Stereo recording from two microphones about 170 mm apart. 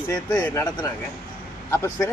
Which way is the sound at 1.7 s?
15° left (ahead or behind).